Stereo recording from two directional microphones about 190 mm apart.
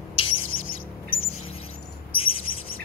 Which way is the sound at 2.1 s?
30° left (ahead or behind).